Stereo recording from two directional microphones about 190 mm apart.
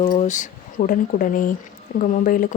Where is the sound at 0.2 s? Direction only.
40° left (ahead or behind).